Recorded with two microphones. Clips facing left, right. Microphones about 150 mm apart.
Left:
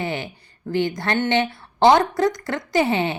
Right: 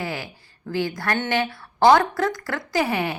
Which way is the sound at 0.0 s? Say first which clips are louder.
Left 3 dB; 20° left (ahead or behind).